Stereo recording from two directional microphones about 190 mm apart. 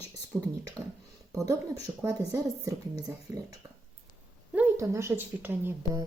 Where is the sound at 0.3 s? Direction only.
5° right (ahead or behind).